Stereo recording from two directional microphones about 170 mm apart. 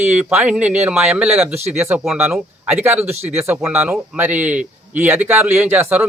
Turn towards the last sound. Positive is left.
turn(degrees=-10)  # may be behind; listen again after turning